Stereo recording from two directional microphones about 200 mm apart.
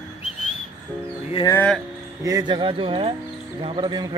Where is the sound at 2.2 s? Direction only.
15° right (ahead or behind).